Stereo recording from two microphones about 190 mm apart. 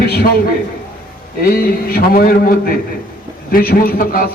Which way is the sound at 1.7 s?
50° left (ahead or behind).